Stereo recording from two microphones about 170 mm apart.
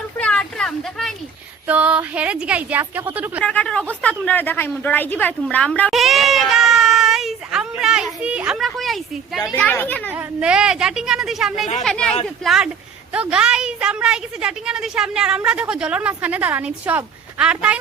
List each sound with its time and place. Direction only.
0.2 s a sound: 5° left (ahead or behind)
1.6 s speech: 5° right (ahead or behind)
3.4 s speech: 5° left (ahead or behind)
4.3 s a sound: 10° left (ahead or behind)
9.6 s speech: 10° left (ahead or behind)
10.1 s a woman's voice: 10° right (ahead or behind)